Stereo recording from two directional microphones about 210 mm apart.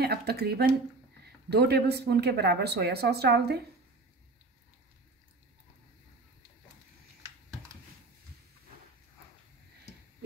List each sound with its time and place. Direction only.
0.0 s speech: 50° right (ahead or behind)